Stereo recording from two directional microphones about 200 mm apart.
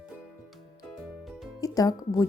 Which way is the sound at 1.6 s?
20° left (ahead or behind).